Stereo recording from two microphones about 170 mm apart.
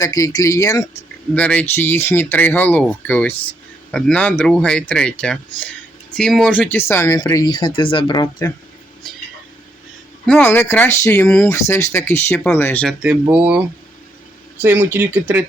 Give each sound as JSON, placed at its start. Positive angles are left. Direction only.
{"t": 0.0, "sound": "speech", "side_deg": 20}
{"t": 1.4, "sound": "speech", "side_deg": 10}
{"t": 10.2, "sound": "speech", "side_deg": 10}
{"t": 13.2, "sound": "speech", "side_deg": -10}
{"t": 14.6, "sound": "speech", "side_deg": -10}